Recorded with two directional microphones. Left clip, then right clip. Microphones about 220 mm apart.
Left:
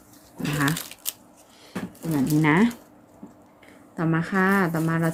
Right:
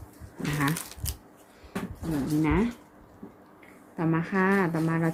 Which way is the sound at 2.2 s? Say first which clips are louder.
Left 6 dB; 35° left (ahead or behind).